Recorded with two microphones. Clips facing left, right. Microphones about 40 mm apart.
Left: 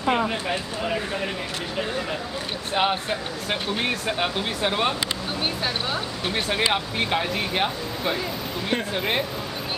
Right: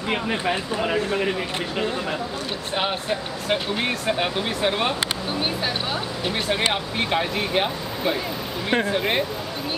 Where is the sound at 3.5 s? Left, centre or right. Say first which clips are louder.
Right 2 dB; centre.